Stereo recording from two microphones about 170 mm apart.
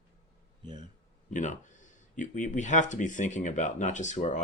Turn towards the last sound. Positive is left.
turn(degrees=45)  # may be behind; listen again after turning